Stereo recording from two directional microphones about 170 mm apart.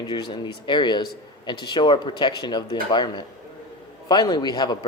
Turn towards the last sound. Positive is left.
turn(degrees=25)  # may be behind; listen again after turning